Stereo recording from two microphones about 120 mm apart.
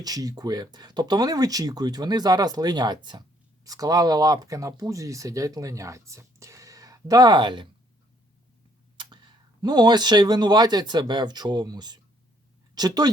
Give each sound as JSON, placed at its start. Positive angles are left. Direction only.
{"t": 0.0, "sound": "speech", "side_deg": -30}
{"t": 9.0, "sound": "speech", "side_deg": -40}